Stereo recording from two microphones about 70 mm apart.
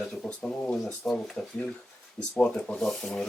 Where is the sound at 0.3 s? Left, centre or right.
Centre.